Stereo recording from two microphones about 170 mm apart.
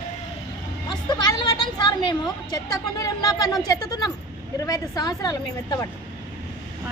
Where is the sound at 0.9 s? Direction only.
25° left (ahead or behind).